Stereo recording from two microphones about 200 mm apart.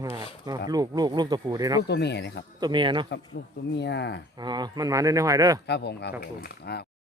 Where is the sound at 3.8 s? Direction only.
60° left (ahead or behind).